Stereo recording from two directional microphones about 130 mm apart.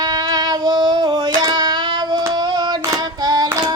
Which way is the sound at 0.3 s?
30° right (ahead or behind).